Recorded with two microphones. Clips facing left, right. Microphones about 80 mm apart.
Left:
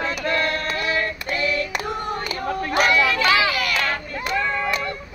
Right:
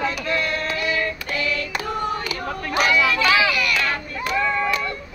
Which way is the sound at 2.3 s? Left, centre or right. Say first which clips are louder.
Left 2 dB; left.